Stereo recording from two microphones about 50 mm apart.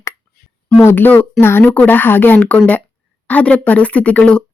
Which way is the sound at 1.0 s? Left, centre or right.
Left.